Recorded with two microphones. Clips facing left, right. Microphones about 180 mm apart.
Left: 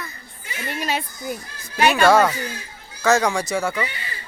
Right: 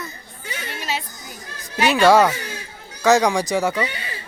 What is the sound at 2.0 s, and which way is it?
Speech, 15° right (ahead or behind).